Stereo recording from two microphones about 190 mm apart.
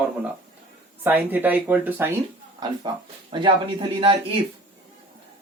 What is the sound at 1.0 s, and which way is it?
Speech, 10° right (ahead or behind).